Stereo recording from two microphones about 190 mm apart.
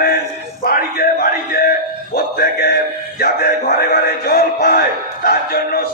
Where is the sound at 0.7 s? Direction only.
50° left (ahead or behind).